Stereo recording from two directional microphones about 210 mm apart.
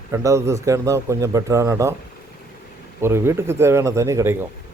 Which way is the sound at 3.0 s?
10° right (ahead or behind).